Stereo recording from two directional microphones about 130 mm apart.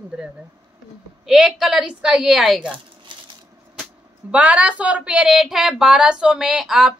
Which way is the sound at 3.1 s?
40° right (ahead or behind).